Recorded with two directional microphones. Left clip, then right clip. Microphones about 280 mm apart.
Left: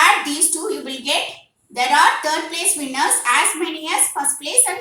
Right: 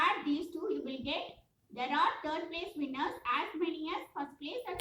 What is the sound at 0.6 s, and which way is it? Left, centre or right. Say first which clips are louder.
A woman's voice: left 14 dB; left.